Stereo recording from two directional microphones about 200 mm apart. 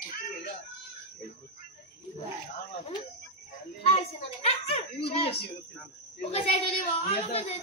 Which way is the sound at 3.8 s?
30° left (ahead or behind).